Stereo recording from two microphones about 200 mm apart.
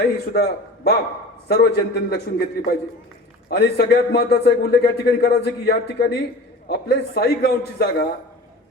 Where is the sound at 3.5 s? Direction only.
55° left (ahead or behind).